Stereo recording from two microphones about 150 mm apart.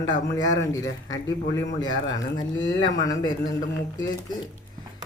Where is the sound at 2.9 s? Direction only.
25° left (ahead or behind).